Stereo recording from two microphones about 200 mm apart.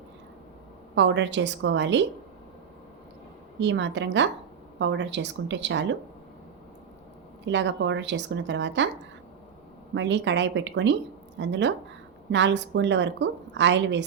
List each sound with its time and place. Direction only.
0.9 s a woman's voice: 65° right (ahead or behind)
3.6 s a woman's voice: 60° right (ahead or behind)
7.4 s a woman's voice: 65° right (ahead or behind)
9.9 s a woman's voice: 65° right (ahead or behind)